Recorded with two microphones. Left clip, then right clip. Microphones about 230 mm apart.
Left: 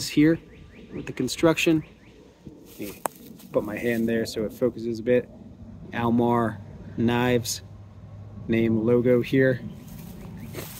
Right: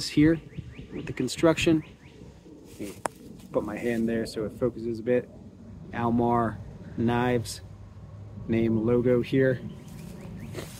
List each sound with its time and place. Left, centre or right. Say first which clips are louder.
0.0 s speech: left 2 dB; centre
3.5 s speech: left 3 dB; centre
10.6 s zipper: left 1 dB; centre